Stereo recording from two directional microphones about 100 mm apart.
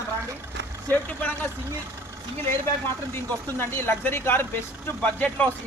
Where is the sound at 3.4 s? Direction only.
25° left (ahead or behind).